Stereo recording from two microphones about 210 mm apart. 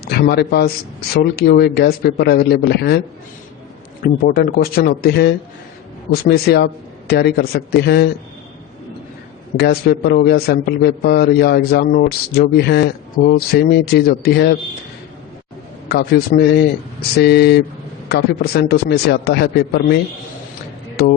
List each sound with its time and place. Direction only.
0.0 s a man's voice: 50° left (ahead or behind)
4.0 s a man's voice: 45° left (ahead or behind)
9.6 s a man's voice: 45° left (ahead or behind)
15.9 s a man's voice: 50° left (ahead or behind)